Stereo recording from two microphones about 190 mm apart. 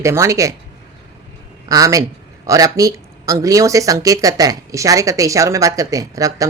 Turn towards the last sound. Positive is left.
turn(degrees=-15)  # may be behind; listen again after turning